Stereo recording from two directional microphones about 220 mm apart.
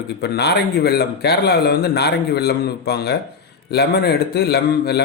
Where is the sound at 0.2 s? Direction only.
45° left (ahead or behind).